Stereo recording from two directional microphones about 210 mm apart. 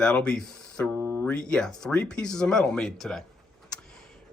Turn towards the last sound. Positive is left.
turn(degrees=0)  # may be behind; listen again after turning